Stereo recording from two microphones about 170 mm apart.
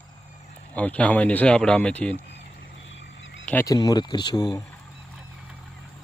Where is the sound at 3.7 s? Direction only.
20° left (ahead or behind).